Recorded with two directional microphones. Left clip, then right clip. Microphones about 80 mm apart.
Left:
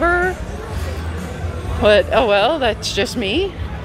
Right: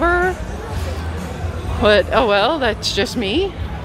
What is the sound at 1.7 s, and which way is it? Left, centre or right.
Speech, right.